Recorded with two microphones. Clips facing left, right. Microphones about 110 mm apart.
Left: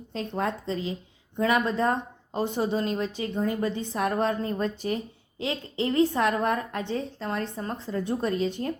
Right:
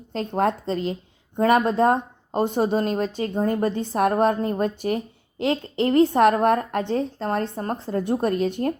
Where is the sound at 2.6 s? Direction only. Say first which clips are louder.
Right 5 dB; 25° right (ahead or behind).